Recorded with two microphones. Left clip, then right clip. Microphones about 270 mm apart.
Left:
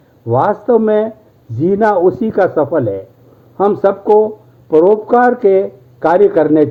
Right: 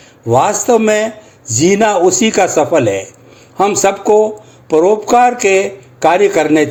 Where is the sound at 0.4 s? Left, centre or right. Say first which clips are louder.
Right 1 dB; right.